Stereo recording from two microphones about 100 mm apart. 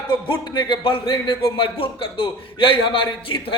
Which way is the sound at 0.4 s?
50° left (ahead or behind).